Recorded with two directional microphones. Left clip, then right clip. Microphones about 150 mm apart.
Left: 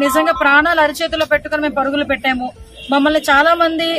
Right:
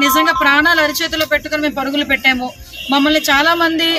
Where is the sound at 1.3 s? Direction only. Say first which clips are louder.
Even; 40° left (ahead or behind).